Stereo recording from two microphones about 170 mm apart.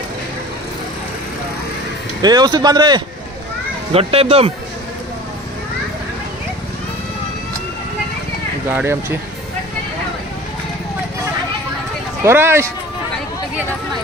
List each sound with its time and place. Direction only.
2.2 s speech: 25° right (ahead or behind)
3.9 s speech: 35° right (ahead or behind)
8.6 s speech: 15° right (ahead or behind)
12.3 s speech: 15° right (ahead or behind)